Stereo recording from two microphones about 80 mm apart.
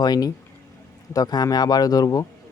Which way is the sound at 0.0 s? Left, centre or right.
Left.